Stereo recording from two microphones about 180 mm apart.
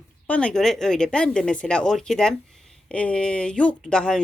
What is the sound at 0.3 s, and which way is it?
A woman's voice, 5° left (ahead or behind).